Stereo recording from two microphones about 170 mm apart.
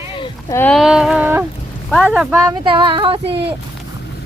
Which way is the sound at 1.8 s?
5° left (ahead or behind).